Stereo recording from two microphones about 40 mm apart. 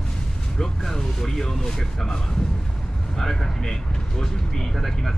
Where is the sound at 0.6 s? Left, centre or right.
Centre.